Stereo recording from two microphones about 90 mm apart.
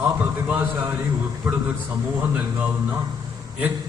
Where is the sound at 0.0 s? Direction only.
25° right (ahead or behind).